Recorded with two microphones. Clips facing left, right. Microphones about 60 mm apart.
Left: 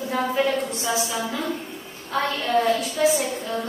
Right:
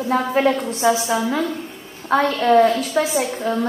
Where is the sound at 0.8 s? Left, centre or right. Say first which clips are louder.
Right 10 dB; right.